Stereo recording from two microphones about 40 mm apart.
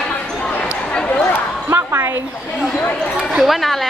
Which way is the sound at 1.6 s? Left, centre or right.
Right.